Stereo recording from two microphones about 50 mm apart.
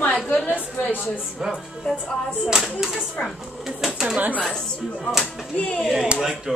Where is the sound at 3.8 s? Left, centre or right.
Centre.